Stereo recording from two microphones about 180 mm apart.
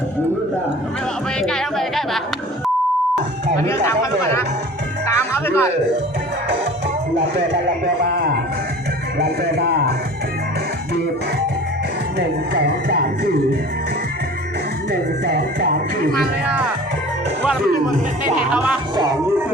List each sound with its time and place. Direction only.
1.4 s a sound: centre (ahead or behind)
3.8 s speech: 15° left (ahead or behind)
9.1 s a man's voice: 65° right (ahead or behind)
12.5 s music: 65° right (ahead or behind)
15.2 s music: 60° right (ahead or behind)
18.3 s music: 5° right (ahead or behind)
18.9 s music: 20° right (ahead or behind)